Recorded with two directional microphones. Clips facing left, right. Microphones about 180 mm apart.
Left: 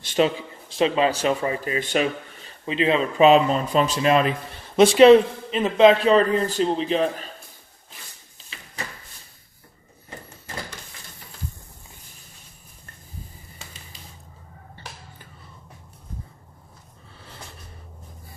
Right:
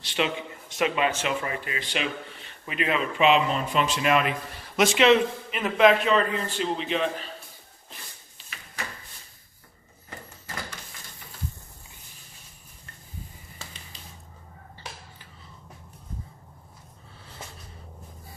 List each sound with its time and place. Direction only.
0.0 s speech: 40° left (ahead or behind)
2.6 s speech: 25° left (ahead or behind)